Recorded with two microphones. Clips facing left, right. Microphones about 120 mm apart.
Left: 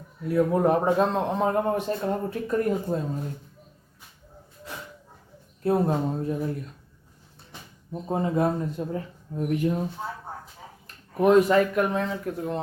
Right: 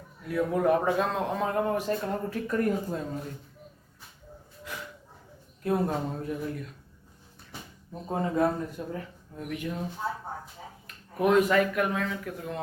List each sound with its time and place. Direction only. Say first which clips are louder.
0.3 s a man's voice: left 3 dB; 35° left (ahead or behind)
5.6 s a man's voice: left 4 dB; 30° left (ahead or behind)
8.1 s speech: left 2 dB; 25° left (ahead or behind)
10.8 s speech: left 5 dB; 30° left (ahead or behind)